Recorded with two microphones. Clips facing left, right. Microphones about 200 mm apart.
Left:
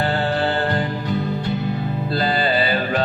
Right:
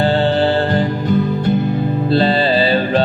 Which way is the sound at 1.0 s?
50° right (ahead or behind).